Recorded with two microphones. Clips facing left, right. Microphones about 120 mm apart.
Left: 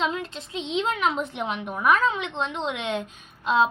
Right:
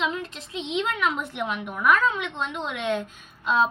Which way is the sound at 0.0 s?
30° left (ahead or behind).